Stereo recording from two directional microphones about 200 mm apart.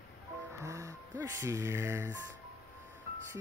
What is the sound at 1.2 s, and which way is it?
Speech, 15° right (ahead or behind).